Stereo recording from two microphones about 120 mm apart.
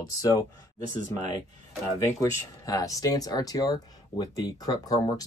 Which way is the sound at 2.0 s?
30° left (ahead or behind).